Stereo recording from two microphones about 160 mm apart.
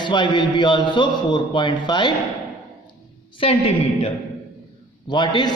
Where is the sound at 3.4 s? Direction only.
35° left (ahead or behind).